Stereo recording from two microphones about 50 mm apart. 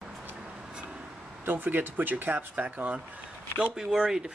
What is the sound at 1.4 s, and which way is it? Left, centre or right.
Speech, right.